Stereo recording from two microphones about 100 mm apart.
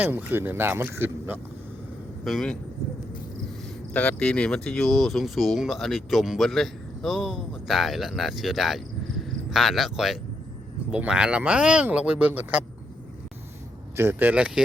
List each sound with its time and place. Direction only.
0.0 s speech: 20° right (ahead or behind)
2.2 s speech: centre (ahead or behind)
3.9 s speech: 15° left (ahead or behind); by 12.6 s 15° right (ahead or behind)
13.9 s speech: 25° right (ahead or behind)